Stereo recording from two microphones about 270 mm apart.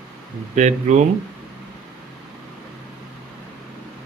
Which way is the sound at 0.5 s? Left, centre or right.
Right.